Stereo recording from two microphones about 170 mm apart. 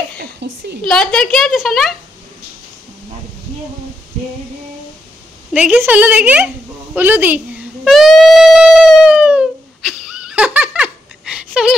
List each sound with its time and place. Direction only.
0.2 s a woman's voice: 80° right
0.8 s a woman's voice: 5° left (ahead or behind)
5.5 s a woman's voice: 10° right (ahead or behind)
7.9 s a sound: centre (ahead or behind)